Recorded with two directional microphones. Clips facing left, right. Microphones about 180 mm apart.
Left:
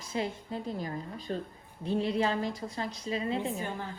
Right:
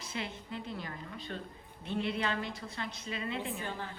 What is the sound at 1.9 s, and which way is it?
A woman's voice, 35° left (ahead or behind).